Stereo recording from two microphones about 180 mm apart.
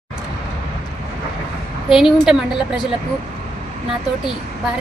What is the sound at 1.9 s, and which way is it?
Speech, centre (ahead or behind).